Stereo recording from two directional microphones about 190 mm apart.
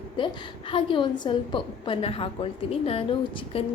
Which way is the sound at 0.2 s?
25° left (ahead or behind).